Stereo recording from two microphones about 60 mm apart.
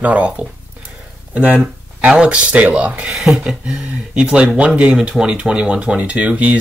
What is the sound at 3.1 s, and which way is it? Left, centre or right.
Speech, centre.